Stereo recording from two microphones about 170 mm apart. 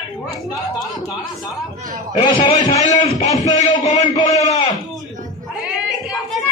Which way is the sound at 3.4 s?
45° left (ahead or behind).